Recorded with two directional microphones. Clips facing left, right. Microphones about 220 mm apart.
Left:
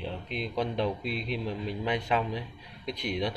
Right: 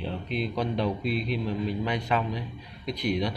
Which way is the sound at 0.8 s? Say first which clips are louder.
Right 3 dB; 25° left (ahead or behind).